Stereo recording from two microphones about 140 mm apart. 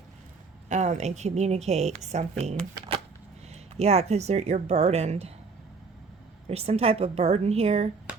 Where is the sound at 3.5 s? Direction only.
50° right (ahead or behind).